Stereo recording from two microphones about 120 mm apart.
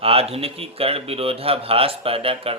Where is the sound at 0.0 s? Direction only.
55° right (ahead or behind).